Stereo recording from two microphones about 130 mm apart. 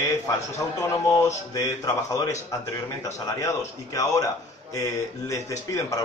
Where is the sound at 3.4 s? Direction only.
25° left (ahead or behind).